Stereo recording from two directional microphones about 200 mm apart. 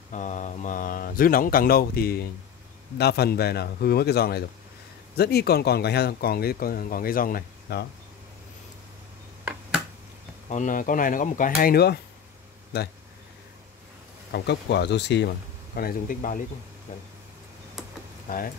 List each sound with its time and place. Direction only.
0.1 s speech: 40° left (ahead or behind)
9.4 s finger snapping: 5° right (ahead or behind)
10.5 s speech: 40° left (ahead or behind)
14.3 s speech: 60° left (ahead or behind); by 16.4 s 40° left (ahead or behind)
17.8 s computer keyboard: centre (ahead or behind)
18.3 s speech: 45° left (ahead or behind)